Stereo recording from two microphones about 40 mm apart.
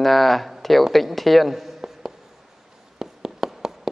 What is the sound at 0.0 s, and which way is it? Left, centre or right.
Speech, centre.